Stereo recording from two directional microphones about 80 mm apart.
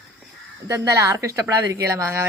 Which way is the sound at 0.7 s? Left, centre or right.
Right.